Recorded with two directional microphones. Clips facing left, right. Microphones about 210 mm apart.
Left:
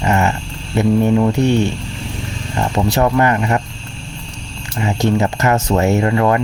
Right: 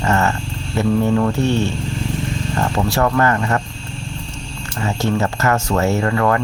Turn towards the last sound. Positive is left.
turn(degrees=20)  # may be behind; listen again after turning